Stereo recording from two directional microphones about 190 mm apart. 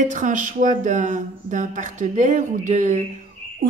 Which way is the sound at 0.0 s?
40° right (ahead or behind).